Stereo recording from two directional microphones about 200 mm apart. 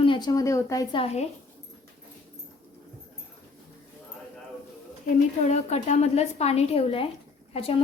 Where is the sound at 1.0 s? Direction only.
30° left (ahead or behind).